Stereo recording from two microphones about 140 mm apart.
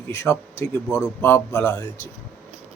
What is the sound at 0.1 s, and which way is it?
A man's voice, 20° left (ahead or behind).